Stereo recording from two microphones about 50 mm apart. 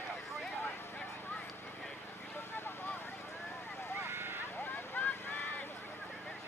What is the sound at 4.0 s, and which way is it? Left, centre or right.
Vehicle, right.